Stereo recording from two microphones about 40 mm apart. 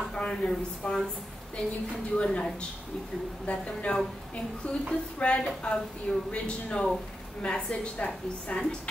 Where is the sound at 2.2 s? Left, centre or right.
Left.